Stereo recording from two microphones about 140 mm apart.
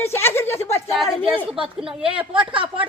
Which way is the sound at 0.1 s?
15° left (ahead or behind).